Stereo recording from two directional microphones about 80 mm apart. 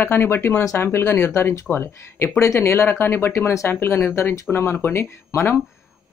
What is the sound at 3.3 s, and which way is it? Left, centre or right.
Speech, left.